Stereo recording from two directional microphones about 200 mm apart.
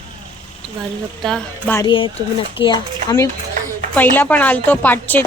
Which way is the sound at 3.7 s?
10° left (ahead or behind).